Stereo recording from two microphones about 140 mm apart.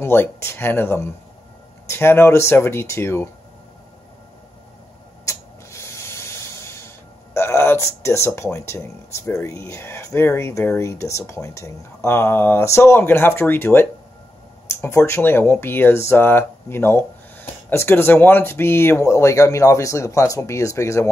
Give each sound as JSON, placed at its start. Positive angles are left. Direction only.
{"t": 0.0, "sound": "speech", "side_deg": 15}
{"t": 5.2, "sound": "spray", "side_deg": 20}
{"t": 7.3, "sound": "a sound", "side_deg": 20}
{"t": 8.4, "sound": "speech", "side_deg": 20}